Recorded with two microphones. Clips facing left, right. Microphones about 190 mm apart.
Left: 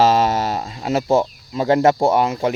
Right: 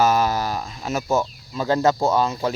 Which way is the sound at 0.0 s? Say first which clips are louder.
Left 3 dB; 25° left (ahead or behind).